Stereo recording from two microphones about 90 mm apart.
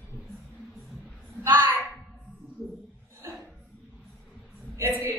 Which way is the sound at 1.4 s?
20° right (ahead or behind).